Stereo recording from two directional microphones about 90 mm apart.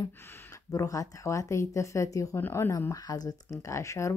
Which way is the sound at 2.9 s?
45° left (ahead or behind).